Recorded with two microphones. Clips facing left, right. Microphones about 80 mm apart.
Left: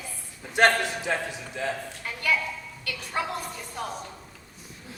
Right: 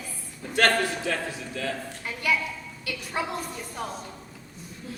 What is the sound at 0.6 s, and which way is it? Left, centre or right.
A man's voice, left.